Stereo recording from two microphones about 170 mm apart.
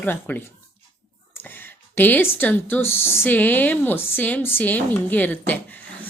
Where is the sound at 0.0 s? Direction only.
10° left (ahead or behind).